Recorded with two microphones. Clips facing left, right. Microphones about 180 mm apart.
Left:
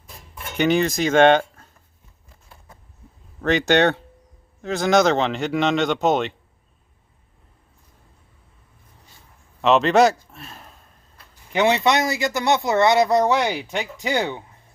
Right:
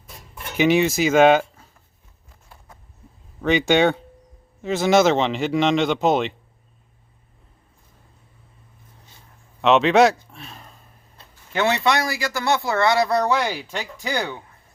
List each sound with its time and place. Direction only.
0.5 s speech: centre (ahead or behind)
3.4 s speech: centre (ahead or behind)
9.6 s a man's voice: centre (ahead or behind)
11.2 s chicken: 25° right (ahead or behind)
11.5 s speech: 20° left (ahead or behind)